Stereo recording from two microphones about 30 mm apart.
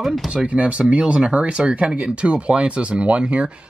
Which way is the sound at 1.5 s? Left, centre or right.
Right.